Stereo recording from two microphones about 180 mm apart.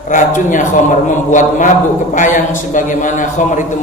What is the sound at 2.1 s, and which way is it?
A man's voice, 45° left (ahead or behind).